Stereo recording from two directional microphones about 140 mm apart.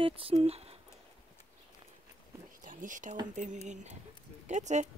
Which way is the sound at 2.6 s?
70° right (ahead or behind).